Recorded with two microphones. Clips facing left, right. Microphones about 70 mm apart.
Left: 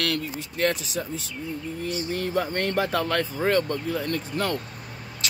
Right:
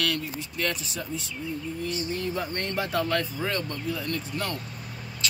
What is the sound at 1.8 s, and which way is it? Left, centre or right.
Speech, left.